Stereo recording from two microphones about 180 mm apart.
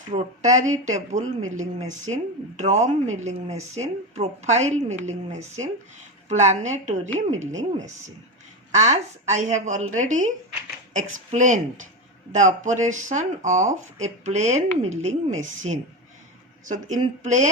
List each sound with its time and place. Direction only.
0.1 s a woman's voice: 40° right (ahead or behind)
16.9 s speech: 45° right (ahead or behind)